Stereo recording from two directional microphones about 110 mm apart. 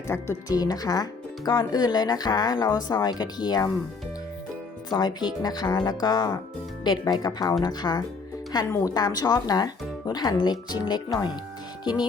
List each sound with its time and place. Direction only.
0.1 s speech: 30° left (ahead or behind)
4.9 s speech: 40° left (ahead or behind)